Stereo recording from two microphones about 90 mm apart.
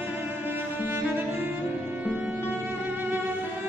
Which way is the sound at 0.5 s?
25° right (ahead or behind).